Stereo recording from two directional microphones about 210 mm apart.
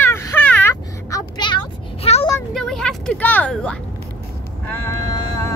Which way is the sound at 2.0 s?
30° left (ahead or behind).